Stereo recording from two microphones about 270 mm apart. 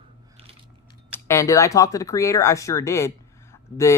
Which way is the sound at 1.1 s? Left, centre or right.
Centre.